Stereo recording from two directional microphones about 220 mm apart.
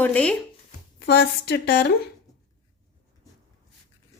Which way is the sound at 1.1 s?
50° left (ahead or behind).